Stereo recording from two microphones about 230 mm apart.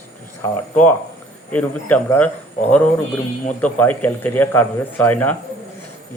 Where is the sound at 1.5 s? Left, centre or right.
Centre.